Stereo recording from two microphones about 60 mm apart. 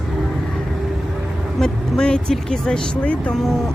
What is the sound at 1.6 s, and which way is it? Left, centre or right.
Speech, centre.